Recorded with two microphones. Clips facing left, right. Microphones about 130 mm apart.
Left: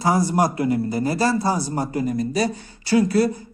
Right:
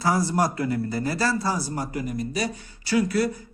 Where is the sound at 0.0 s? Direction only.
20° left (ahead or behind).